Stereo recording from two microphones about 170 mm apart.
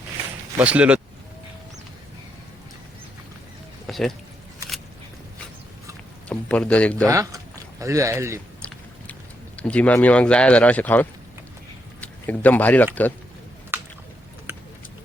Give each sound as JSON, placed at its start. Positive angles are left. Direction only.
{"t": 0.6, "sound": "speech", "side_deg": -10}
{"t": 3.8, "sound": "a sound", "side_deg": 0}
{"t": 6.2, "sound": "speech", "side_deg": 5}
{"t": 7.1, "sound": "speech", "side_deg": -20}
{"t": 9.6, "sound": "speech", "side_deg": 5}
{"t": 13.7, "sound": "a sound", "side_deg": -15}